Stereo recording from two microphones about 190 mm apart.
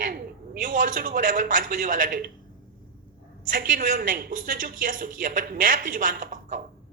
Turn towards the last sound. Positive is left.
turn(degrees=-45)  # may be behind; listen again after turning